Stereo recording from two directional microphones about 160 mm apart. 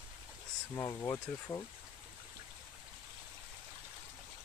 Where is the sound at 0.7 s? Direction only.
20° left (ahead or behind).